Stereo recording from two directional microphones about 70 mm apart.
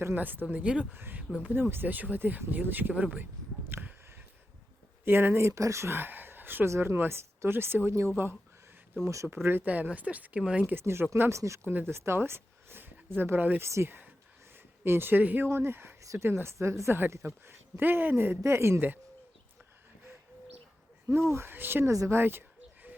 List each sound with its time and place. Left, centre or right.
0.0 s speech: right
0.5 s speech: centre
0.9 s speech: right
1.3 s speech: centre
3.7 s a sound: right
5.0 s speech: right
9.0 s speech: right
9.3 s speech: right
10.8 s speech: right
13.6 s speech: right
15.4 s speech: right
21.1 s speech: right
21.8 s speech: right
22.2 s a sound: right